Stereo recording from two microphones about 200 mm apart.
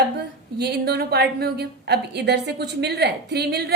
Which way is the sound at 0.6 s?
50° right (ahead or behind).